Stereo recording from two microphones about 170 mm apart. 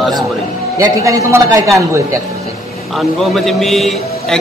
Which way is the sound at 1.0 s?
20° right (ahead or behind).